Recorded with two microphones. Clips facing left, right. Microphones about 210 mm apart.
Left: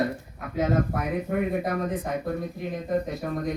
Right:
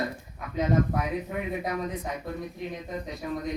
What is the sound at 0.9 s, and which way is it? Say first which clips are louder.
Speech: left 3 dB; 55° left (ahead or behind).